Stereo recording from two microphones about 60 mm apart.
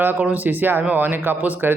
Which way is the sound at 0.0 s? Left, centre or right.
Right.